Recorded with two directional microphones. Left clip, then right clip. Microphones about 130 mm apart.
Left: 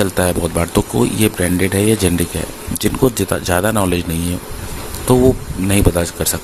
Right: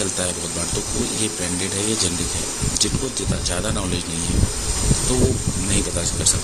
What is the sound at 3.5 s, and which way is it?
Speech, 50° left (ahead or behind).